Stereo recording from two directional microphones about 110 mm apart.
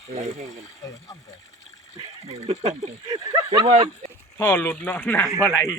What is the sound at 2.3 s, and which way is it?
Speech, 70° right (ahead or behind).